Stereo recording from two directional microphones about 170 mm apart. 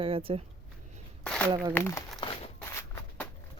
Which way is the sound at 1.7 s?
15° left (ahead or behind).